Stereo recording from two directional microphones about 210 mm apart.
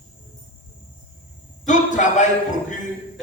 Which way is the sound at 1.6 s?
35° left (ahead or behind).